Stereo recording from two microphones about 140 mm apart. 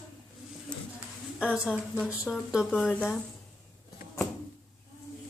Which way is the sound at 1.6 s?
5° right (ahead or behind).